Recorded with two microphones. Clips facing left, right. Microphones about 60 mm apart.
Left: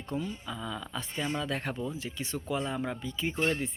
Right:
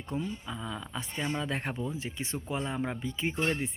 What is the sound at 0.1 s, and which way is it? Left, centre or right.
Speech, right.